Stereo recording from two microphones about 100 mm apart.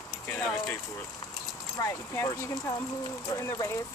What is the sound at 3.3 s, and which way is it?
Speech, 35° left (ahead or behind).